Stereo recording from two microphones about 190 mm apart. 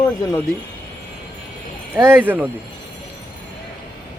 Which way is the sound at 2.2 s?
10° right (ahead or behind).